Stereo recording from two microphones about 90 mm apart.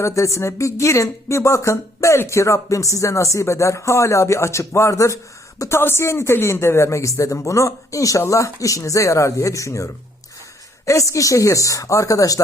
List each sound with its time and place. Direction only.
0.0 s speech: 35° left (ahead or behind)